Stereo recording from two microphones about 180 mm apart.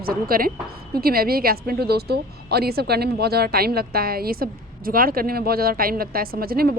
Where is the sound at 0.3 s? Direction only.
55° right (ahead or behind).